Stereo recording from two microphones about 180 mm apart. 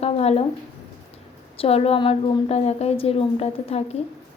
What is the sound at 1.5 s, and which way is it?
A woman's voice, 30° left (ahead or behind).